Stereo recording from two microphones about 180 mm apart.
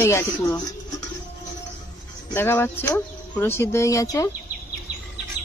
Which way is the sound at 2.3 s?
10° left (ahead or behind).